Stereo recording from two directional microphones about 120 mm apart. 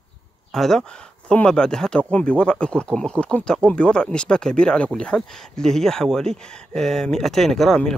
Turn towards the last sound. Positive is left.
turn(degrees=5)  # may be behind; listen again after turning